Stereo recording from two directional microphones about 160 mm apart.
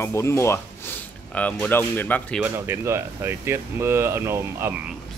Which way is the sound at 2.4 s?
15° right (ahead or behind).